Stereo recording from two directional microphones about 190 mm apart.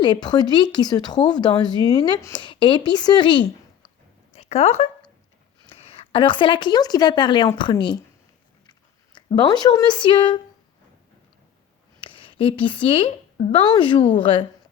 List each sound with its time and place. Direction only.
0.0 s speech: 25° left (ahead or behind)
9.1 s speech: 25° left (ahead or behind)
11.9 s a woman's voice: 30° left (ahead or behind)